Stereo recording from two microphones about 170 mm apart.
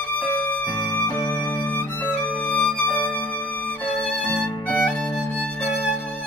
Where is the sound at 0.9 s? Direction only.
15° left (ahead or behind).